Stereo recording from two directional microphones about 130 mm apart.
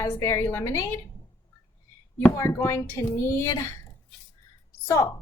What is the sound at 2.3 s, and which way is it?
Speech, 25° left (ahead or behind).